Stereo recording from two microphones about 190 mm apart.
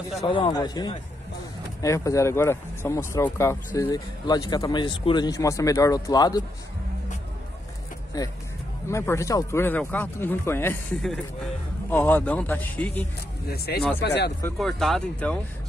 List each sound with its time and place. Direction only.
0.2 s speech: 20° left (ahead or behind)
8.2 s speech: 20° left (ahead or behind)
13.5 s speech: 55° left (ahead or behind)
14.6 s speech: centre (ahead or behind)